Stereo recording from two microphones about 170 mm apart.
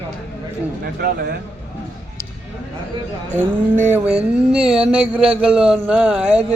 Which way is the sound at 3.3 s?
10° left (ahead or behind).